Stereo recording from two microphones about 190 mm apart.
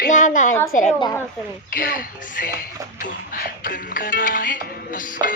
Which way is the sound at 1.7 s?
50° left (ahead or behind).